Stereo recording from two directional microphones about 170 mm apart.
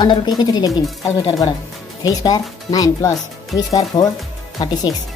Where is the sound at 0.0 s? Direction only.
25° left (ahead or behind).